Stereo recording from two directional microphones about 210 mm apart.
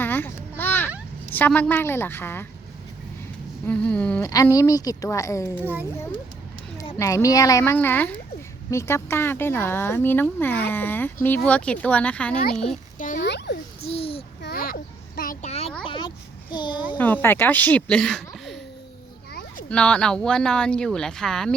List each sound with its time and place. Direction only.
0.0 s babbling: 10° left (ahead or behind)
1.3 s speech: 10° left (ahead or behind)
3.7 s speech: 5° left (ahead or behind)
4.3 s speech: 15° left (ahead or behind)
5.5 s a child's voice: 10° right (ahead or behind)
7.0 s speech: 15° left (ahead or behind)
13.0 s a child's voice: 40° left (ahead or behind)
13.2 s a child's voice: 55° left (ahead or behind)
13.8 s a sound: 25° left (ahead or behind)
14.4 s a sound: 45° left (ahead or behind)
15.8 s a child's voice: 25° left (ahead or behind)
17.0 s speech: 10° left (ahead or behind)
19.3 s a sound: 50° left (ahead or behind)
19.7 s speech: 5° left (ahead or behind)